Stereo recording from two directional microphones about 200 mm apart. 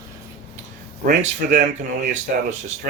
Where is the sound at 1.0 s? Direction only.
40° right (ahead or behind).